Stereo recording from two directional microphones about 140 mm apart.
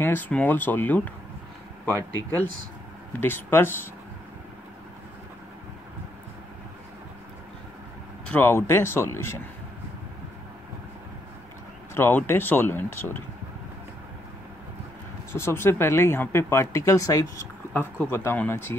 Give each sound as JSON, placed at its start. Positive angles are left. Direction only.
{"t": 0.0, "sound": "speech", "side_deg": 15}
{"t": 3.1, "sound": "speech", "side_deg": 15}
{"t": 8.3, "sound": "speech", "side_deg": 15}
{"t": 11.9, "sound": "speech", "side_deg": 15}
{"t": 15.3, "sound": "speech", "side_deg": 15}